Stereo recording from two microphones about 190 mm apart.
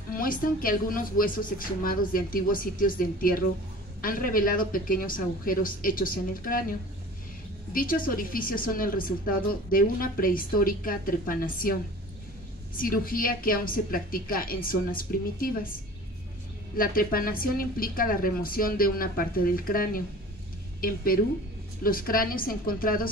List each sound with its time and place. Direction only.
0.1 s a woman's voice: 50° left (ahead or behind)
7.7 s a woman's voice: 50° left (ahead or behind)
12.7 s a woman's voice: 50° left (ahead or behind)